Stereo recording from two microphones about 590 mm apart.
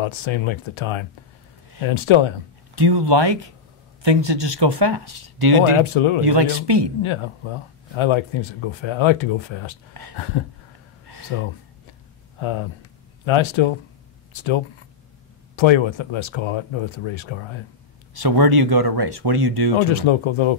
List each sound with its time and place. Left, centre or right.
0.0 s speech: left
2.7 s speech: right
5.8 s speech: left
6.2 s speech: right
7.0 s speech: left
12.4 s speech: left
18.1 s speech: right
19.9 s speech: left